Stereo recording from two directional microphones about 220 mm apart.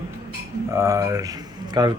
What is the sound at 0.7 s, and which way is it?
Speech, 15° right (ahead or behind).